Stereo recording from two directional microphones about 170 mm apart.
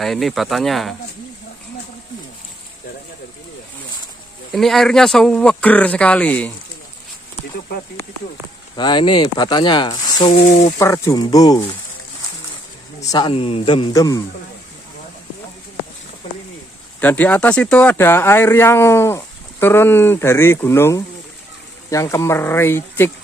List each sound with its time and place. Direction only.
0.0 s speech: centre (ahead or behind)
4.5 s speech: centre (ahead or behind)
8.7 s speech: 25° left (ahead or behind)
10.8 s speech: 20° left (ahead or behind)
13.0 s speech: 20° left (ahead or behind)
13.3 s speech: 35° left (ahead or behind)
17.0 s speech: 10° left (ahead or behind)